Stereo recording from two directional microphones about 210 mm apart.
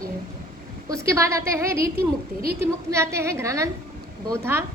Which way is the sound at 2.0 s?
45° right (ahead or behind).